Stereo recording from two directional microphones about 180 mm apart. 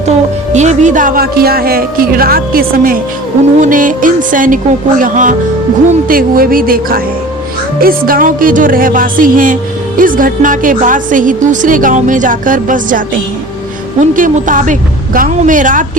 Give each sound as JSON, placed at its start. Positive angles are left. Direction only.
{"t": 0.5, "sound": "speech", "side_deg": -40}
{"t": 14.0, "sound": "speech", "side_deg": -45}